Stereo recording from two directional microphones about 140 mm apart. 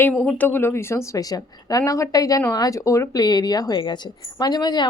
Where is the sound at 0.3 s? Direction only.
15° left (ahead or behind).